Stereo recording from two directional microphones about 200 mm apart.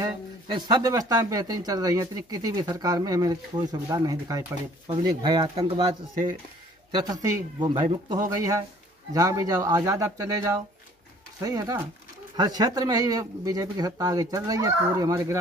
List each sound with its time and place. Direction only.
0.0 s speech: 20° right (ahead or behind)
6.9 s speech: 20° right (ahead or behind)